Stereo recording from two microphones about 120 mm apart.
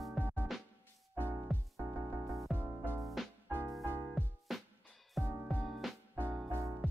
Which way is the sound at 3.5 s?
20° right (ahead or behind).